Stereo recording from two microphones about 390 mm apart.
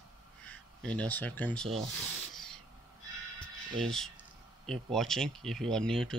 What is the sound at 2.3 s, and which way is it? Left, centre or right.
Spray, centre.